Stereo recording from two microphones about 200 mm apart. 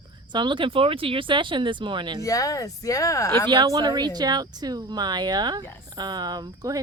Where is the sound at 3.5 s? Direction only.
20° right (ahead or behind).